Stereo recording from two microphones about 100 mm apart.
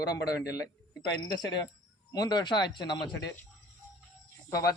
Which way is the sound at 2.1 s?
45° left (ahead or behind).